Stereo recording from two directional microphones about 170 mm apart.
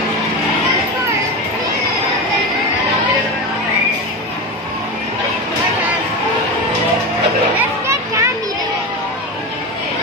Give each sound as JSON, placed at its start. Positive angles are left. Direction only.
{"t": 7.8, "sound": "children playing", "side_deg": -15}